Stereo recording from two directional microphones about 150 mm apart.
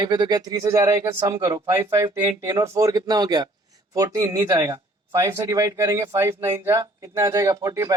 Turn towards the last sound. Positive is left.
turn(degrees=-20)  # may be behind; listen again after turning